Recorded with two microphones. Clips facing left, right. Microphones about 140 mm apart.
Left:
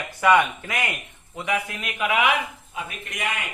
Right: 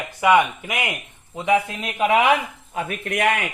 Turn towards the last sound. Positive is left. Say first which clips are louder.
# right 9 dB
turn(degrees=-65)  # may be behind; listen again after turning